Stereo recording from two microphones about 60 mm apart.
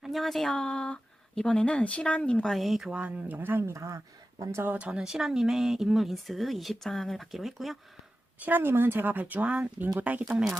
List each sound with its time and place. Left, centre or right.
0.0 s speech: centre
0.5 s speech: centre
2.5 s speech: centre
2.9 s speech: right
3.7 s speech: right
4.6 s speech: right
4.9 s speech: centre
8.4 s speech: right; by 10.5 s centre